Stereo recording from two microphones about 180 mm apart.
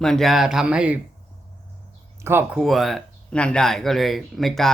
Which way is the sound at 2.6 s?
Centre (ahead or behind).